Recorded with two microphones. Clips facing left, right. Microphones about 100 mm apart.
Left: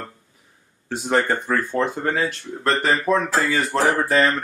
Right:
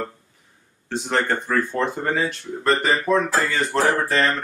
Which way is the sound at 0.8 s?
5° left (ahead or behind).